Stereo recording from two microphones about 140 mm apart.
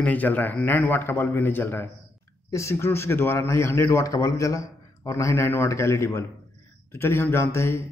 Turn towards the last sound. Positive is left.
turn(degrees=20)  # may be behind; listen again after turning